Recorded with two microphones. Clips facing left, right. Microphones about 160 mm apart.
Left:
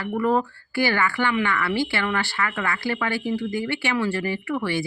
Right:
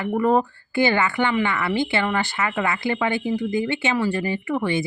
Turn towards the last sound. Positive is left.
turn(degrees=-20)  # may be behind; listen again after turning